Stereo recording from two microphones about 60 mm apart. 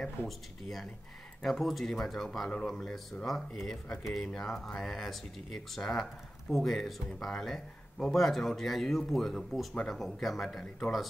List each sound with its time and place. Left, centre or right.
0.2 s speech: left
1.4 s speech: centre